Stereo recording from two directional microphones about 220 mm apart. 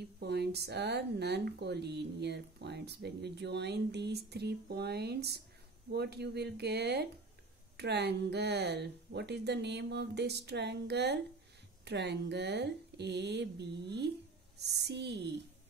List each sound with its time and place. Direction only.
0.2 s speech: 50° right (ahead or behind)